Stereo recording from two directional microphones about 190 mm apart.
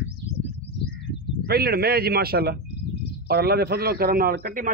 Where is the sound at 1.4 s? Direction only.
55° right (ahead or behind).